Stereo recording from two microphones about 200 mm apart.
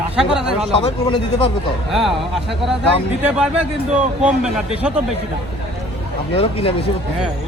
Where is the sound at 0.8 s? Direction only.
25° left (ahead or behind).